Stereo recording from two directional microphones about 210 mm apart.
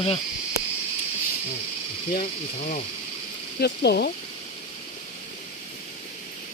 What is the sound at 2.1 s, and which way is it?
Speech, 40° left (ahead or behind).